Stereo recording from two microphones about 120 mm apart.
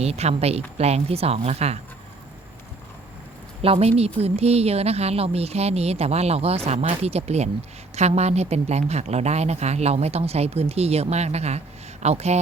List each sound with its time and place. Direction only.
0.0 s speech: 60° right (ahead or behind)
3.6 s speech: 55° right (ahead or behind)